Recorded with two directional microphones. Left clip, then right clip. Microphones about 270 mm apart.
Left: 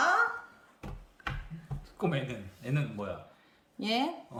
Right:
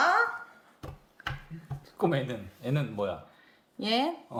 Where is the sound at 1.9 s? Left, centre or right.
Right.